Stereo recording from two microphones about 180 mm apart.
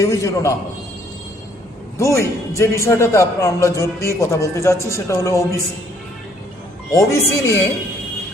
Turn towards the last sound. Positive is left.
turn(degrees=15)  # may be behind; listen again after turning